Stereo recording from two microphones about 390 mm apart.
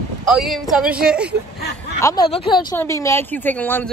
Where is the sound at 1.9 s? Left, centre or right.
Centre.